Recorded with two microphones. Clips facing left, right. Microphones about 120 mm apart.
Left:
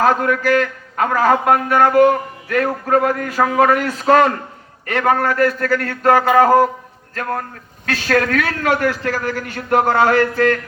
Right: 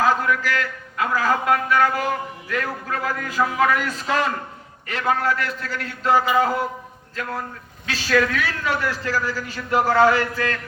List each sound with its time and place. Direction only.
0.0 s a man's voice: 50° left (ahead or behind)